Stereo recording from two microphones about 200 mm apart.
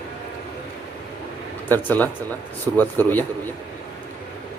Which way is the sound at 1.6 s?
10° left (ahead or behind).